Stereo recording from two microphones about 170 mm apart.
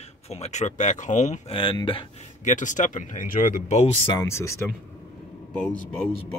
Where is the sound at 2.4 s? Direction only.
45° left (ahead or behind).